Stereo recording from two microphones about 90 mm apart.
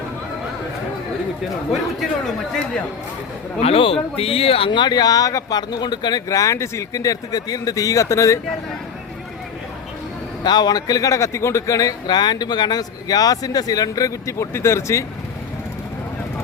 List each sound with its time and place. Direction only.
3.7 s speech: 90° left; by 6.2 s 50° left (ahead or behind)
6.2 s speech: 35° left (ahead or behind)
10.4 s speech: 50° left (ahead or behind); by 15.0 s 30° left (ahead or behind)